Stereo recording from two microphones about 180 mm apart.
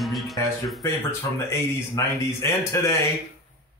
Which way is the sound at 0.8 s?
15° left (ahead or behind).